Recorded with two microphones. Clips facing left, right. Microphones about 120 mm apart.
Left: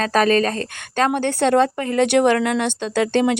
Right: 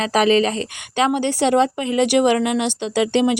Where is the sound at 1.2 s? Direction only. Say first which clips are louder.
Left 1 dB; 55° left (ahead or behind).